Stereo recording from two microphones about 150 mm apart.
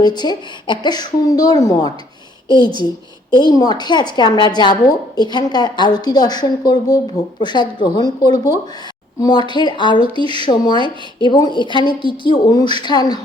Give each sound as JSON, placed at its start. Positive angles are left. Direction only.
{"t": 0.0, "sound": "a woman's voice", "side_deg": 30}